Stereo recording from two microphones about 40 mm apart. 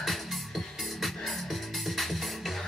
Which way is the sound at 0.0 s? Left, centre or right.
Centre.